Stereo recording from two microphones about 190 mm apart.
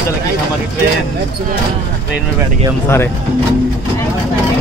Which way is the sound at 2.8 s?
10° left (ahead or behind).